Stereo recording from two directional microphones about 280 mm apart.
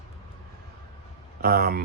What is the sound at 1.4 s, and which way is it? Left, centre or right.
Speech, right.